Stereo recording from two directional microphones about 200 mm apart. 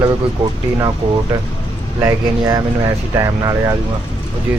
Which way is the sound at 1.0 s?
30° right (ahead or behind).